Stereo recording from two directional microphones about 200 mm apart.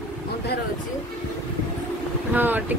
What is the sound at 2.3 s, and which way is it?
Speech, 10° right (ahead or behind).